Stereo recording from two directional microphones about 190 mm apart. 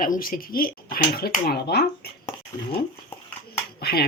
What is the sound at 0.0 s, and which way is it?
Speech, 45° left (ahead or behind).